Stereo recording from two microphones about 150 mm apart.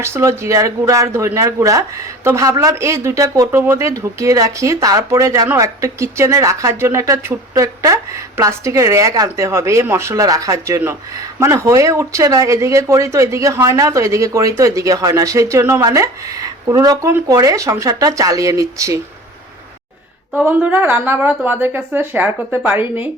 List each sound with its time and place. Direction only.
0.0 s speech: 15° right (ahead or behind)
20.4 s speech: 10° right (ahead or behind)